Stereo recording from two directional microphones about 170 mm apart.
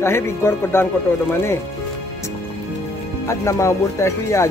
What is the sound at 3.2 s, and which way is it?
Speech, 15° left (ahead or behind).